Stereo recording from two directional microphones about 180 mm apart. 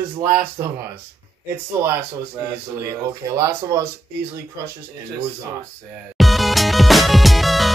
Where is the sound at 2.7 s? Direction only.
15° right (ahead or behind).